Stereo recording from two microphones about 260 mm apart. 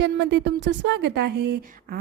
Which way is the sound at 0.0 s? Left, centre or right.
Right.